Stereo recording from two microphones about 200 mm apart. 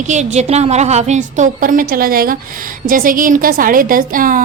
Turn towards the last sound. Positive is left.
turn(degrees=-45)  # may be behind; listen again after turning